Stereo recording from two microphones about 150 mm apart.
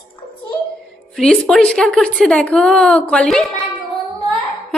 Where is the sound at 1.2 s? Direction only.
5° left (ahead or behind).